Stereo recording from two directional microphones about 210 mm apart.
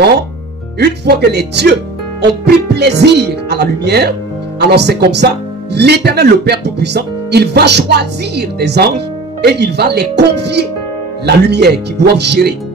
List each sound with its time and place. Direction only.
0.7 s speech: 50° right (ahead or behind)